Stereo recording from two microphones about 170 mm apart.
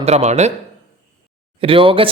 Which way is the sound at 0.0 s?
40° right (ahead or behind).